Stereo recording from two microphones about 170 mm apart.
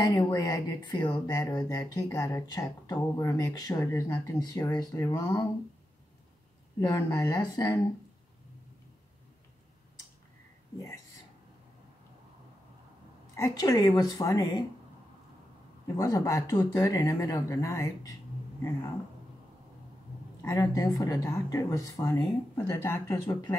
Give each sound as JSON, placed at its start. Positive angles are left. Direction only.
{"t": 0.0, "sound": "speech", "side_deg": 20}
{"t": 6.8, "sound": "speech", "side_deg": 20}
{"t": 13.4, "sound": "speech", "side_deg": 20}
{"t": 16.0, "sound": "speech", "side_deg": 20}
{"t": 20.4, "sound": "speech", "side_deg": 20}